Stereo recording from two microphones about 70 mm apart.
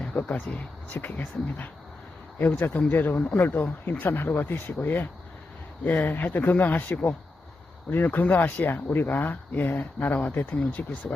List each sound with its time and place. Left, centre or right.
0.0 s speech: centre